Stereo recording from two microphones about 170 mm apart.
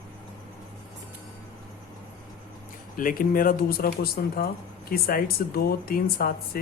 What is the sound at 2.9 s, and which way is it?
Speech, 55° left (ahead or behind).